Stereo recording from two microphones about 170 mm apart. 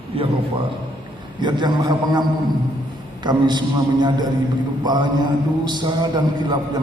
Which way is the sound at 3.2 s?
25° right (ahead or behind).